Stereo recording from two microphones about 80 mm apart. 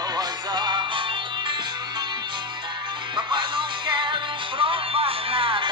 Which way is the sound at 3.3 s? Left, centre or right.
Right.